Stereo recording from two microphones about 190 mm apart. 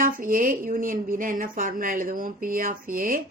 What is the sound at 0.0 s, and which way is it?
A woman's voice, 45° right (ahead or behind).